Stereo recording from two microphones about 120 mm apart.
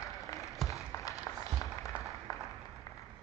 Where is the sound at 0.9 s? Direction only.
25° left (ahead or behind).